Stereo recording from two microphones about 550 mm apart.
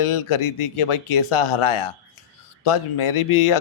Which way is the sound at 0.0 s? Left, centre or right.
Left.